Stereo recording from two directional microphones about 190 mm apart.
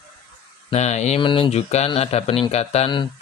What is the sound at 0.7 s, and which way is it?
Speech, 35° left (ahead or behind).